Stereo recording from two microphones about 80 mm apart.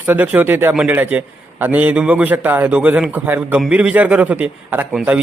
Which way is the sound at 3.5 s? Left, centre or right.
Centre.